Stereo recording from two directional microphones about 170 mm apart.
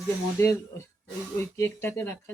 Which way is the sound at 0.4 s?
20° left (ahead or behind).